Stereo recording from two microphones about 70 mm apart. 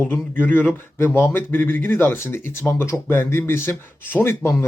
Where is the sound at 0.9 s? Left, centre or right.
Left.